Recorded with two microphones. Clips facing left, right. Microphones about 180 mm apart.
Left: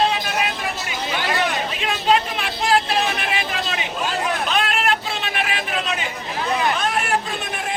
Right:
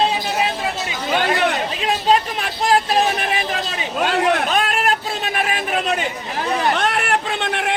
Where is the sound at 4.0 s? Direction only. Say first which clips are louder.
Right 8 dB; 65° right (ahead or behind).